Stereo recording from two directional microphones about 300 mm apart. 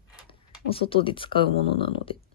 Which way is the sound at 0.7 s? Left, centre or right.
Centre.